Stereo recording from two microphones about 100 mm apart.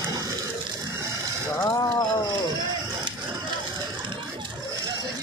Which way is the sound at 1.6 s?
35° left (ahead or behind).